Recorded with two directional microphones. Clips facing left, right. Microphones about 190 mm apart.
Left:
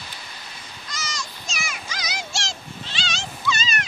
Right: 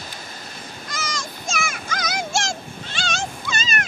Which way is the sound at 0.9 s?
50° right (ahead or behind).